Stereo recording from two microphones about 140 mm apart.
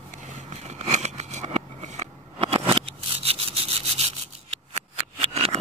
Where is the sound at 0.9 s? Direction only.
55° right (ahead or behind).